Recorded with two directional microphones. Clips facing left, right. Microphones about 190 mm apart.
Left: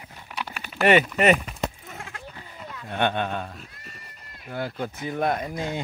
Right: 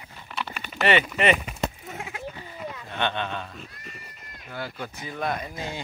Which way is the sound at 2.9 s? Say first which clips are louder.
Left 4 dB; 50° left (ahead or behind).